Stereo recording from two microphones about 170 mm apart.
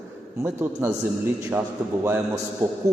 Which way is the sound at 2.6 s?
15° right (ahead or behind).